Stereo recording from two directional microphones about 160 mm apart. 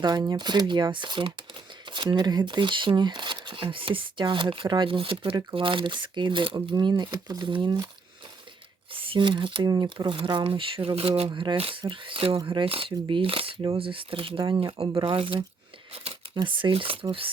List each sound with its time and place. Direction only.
0.0 s speech: 25° right (ahead or behind)
8.9 s speech: 35° right (ahead or behind)